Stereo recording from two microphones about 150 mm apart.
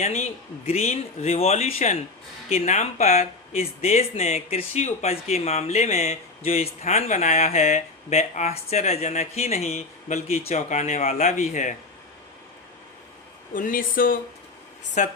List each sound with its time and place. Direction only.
0.0 s speech: 45° left (ahead or behind)
13.5 s speech: 65° left (ahead or behind)
15.0 s speech: 55° left (ahead or behind)